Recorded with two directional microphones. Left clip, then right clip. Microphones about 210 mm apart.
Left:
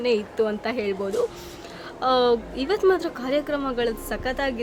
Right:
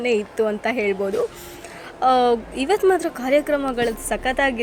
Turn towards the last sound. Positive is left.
turn(degrees=-20)  # may be behind; listen again after turning